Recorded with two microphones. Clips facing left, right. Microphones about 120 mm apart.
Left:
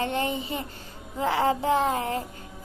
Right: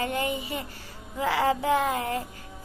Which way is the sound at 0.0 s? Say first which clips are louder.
Left 1 dB; 25° left (ahead or behind).